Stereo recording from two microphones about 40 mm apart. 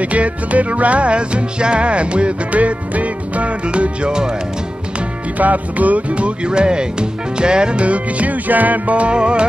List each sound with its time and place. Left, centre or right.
0.0 s music: right; by 4.4 s centre
5.4 s music: right